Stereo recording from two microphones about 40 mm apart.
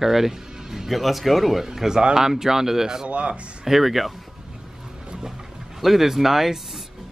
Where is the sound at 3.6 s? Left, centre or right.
Centre.